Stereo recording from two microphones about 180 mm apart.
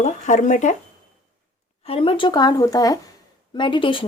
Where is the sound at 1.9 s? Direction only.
30° left (ahead or behind).